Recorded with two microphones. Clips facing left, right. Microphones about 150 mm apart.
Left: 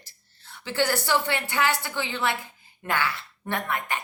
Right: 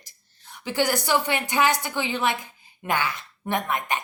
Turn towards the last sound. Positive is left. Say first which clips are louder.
# right 3 dB
turn(degrees=-20)  # may be behind; listen again after turning